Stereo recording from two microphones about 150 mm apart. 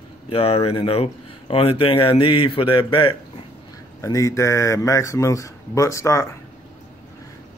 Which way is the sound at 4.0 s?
20° left (ahead or behind).